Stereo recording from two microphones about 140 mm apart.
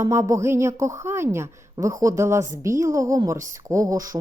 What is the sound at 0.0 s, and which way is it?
A woman's voice, 20° right (ahead or behind).